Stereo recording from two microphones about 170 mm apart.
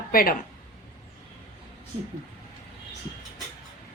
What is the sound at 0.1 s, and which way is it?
Speech, 60° left (ahead or behind).